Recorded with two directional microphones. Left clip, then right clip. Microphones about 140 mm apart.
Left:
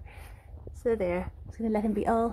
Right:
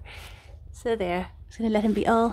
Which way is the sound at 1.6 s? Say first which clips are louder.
Right 5 dB; 20° right (ahead or behind).